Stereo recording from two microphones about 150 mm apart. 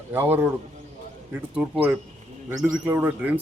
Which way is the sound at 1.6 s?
10° right (ahead or behind).